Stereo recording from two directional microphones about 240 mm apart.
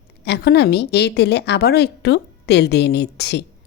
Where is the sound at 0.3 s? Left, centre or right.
Left.